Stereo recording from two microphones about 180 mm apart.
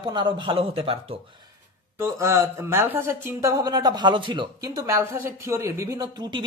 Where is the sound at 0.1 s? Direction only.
25° right (ahead or behind).